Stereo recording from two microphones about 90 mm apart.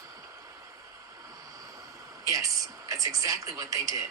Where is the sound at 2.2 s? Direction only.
40° right (ahead or behind).